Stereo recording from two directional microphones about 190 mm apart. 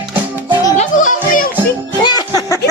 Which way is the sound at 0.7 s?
40° left (ahead or behind).